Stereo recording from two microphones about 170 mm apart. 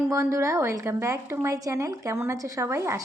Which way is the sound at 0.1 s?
15° right (ahead or behind).